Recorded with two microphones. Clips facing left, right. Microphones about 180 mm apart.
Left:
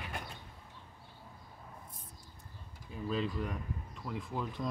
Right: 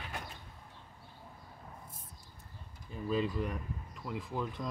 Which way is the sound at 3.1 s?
Centre (ahead or behind).